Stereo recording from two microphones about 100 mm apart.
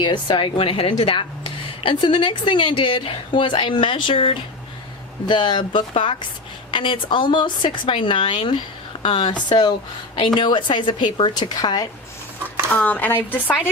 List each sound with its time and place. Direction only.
0.0 s a woman's voice: 50° left (ahead or behind); by 4.4 s 70° left (ahead or behind)
5.2 s speech: 50° left (ahead or behind)
5.9 s a woman's voice: 65° left (ahead or behind); by 11.9 s 40° left (ahead or behind)
12.7 s speech: 15° left (ahead or behind)